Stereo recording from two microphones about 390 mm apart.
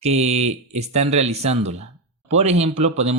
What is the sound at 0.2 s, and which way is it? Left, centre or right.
Mantra, centre.